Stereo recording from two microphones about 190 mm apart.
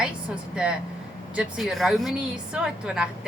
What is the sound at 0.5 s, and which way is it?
A woman's voice, 5° right (ahead or behind).